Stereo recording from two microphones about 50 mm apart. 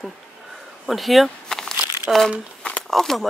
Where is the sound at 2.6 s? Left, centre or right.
Left.